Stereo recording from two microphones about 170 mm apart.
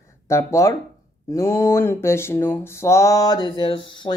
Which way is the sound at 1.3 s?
15° left (ahead or behind).